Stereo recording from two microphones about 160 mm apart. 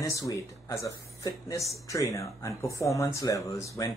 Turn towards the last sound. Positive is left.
turn(degrees=20)  # may be behind; listen again after turning